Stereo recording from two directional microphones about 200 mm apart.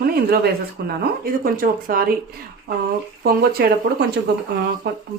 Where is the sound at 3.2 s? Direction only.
50° right (ahead or behind).